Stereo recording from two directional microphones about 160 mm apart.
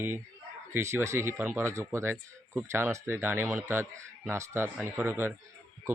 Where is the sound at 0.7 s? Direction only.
15° right (ahead or behind).